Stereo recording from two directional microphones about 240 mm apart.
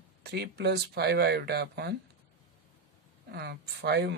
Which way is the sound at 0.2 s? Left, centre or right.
Right.